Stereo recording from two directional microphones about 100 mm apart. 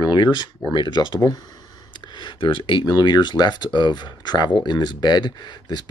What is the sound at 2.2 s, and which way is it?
Speech, 55° left (ahead or behind).